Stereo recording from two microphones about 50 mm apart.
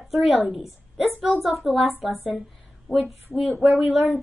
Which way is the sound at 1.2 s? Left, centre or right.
Centre.